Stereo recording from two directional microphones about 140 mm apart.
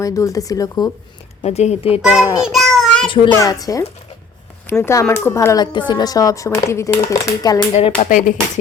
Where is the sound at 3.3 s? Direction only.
25° left (ahead or behind).